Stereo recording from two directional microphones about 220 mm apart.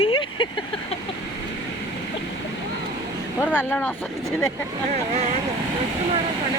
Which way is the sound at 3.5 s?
10° left (ahead or behind).